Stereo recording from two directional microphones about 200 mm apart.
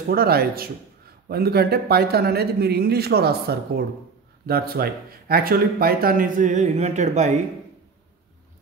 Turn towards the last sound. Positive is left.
turn(degrees=-35)  # may be behind; listen again after turning